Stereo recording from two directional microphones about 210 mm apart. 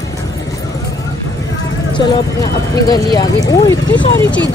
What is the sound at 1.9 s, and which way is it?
Speech, 20° left (ahead or behind).